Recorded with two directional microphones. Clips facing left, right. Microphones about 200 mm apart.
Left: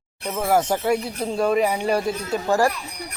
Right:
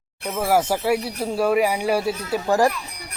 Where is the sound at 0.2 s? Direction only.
5° right (ahead or behind).